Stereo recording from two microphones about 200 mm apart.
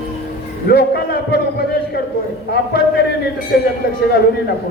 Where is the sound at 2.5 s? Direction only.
50° left (ahead or behind).